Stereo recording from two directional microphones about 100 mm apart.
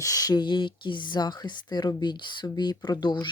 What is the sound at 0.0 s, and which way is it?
Speech, 35° left (ahead or behind).